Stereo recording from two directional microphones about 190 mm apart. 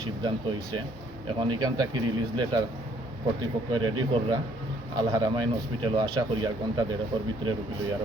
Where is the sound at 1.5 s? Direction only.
20° right (ahead or behind).